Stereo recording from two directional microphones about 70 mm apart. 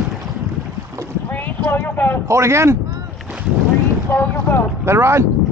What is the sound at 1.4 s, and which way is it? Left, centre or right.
Speech, left.